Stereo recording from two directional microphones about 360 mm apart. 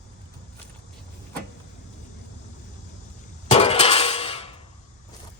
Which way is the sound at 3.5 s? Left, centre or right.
Centre.